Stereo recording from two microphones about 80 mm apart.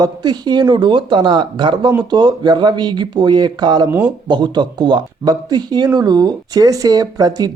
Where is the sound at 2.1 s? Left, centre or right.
Right.